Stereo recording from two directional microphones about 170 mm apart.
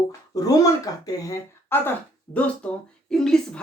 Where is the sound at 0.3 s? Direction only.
20° left (ahead or behind).